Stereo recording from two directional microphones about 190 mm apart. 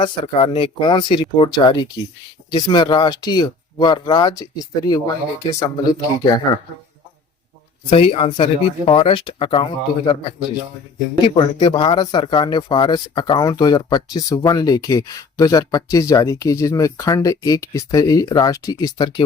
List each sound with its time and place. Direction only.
0.0 s speech: 30° left (ahead or behind)
7.9 s speech: 30° left (ahead or behind)